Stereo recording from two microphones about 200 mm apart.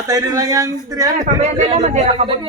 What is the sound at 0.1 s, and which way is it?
A man's voice, 15° right (ahead or behind).